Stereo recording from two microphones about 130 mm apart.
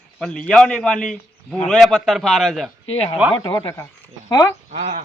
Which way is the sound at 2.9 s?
50° left (ahead or behind).